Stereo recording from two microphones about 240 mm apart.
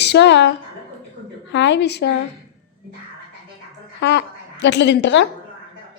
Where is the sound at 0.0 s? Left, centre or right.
Left.